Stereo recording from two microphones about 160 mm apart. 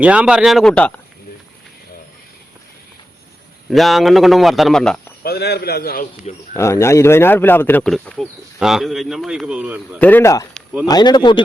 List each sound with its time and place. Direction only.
0.0 s speech: 10° right (ahead or behind)
3.7 s speech: centre (ahead or behind)
5.2 s a man's voice: 80° left
6.5 s speech: 15° left (ahead or behind)
7.9 s speech: centre (ahead or behind)
10.0 s speech: 10° left (ahead or behind); by 11.4 s 30° left (ahead or behind)